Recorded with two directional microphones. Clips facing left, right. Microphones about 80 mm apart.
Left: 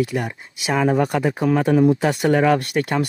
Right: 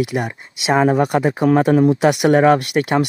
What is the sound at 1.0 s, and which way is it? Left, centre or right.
Speech, centre.